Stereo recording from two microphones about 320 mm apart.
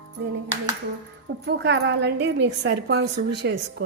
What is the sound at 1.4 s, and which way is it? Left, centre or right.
A woman's voice, right.